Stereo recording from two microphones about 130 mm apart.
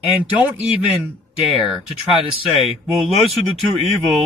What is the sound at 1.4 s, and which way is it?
Speech, centre (ahead or behind).